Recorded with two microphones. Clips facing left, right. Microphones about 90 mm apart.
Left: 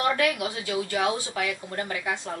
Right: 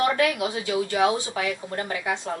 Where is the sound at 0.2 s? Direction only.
25° right (ahead or behind).